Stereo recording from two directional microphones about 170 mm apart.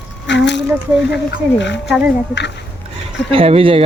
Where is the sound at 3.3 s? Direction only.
35° right (ahead or behind).